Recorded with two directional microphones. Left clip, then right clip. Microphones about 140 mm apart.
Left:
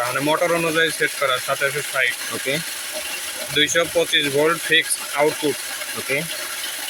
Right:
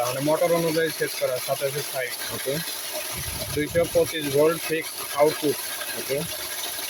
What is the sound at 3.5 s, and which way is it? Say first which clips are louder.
Speech: left 4 dB; 30° right (ahead or behind).